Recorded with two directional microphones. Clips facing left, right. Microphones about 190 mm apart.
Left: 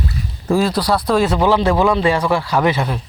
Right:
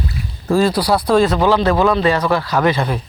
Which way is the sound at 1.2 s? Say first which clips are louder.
Right 1 dB; 10° left (ahead or behind).